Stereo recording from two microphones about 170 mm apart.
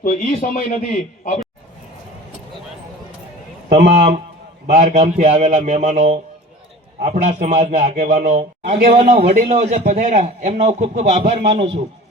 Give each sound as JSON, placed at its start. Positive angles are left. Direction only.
{"t": 0.0, "sound": "speech", "side_deg": 50}
{"t": 3.8, "sound": "a man's voice", "side_deg": -40}
{"t": 9.2, "sound": "speech", "side_deg": -55}
{"t": 9.5, "sound": "a man's voice", "side_deg": -40}